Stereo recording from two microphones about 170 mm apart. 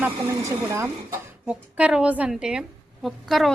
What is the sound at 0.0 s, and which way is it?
A woman's voice, 15° right (ahead or behind).